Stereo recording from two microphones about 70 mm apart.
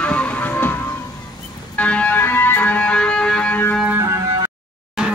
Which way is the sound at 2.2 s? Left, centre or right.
Left.